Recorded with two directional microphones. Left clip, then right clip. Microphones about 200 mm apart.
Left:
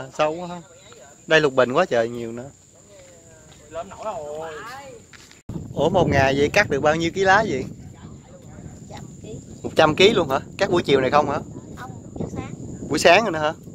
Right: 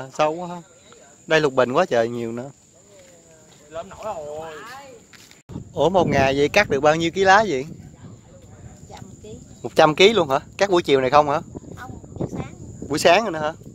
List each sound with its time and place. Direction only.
0.2 s speech: 15° right (ahead or behind)
3.7 s speech: 60° right (ahead or behind)
4.4 s speech: 20° right (ahead or behind)
8.9 s a sound: 15° right (ahead or behind)
12.8 s speech: 5° right (ahead or behind)